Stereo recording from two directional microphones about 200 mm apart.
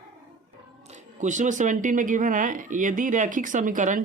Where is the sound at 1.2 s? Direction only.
40° right (ahead or behind).